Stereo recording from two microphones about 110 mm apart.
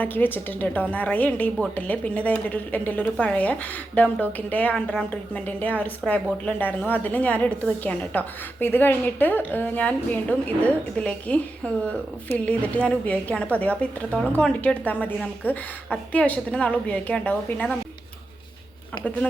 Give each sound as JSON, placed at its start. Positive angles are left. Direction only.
{"t": 0.0, "sound": "a woman's voice", "side_deg": 15}